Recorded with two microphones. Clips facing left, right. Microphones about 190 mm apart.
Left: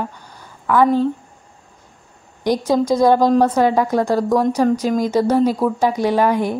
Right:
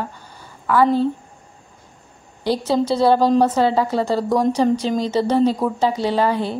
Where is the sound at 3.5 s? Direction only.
15° left (ahead or behind).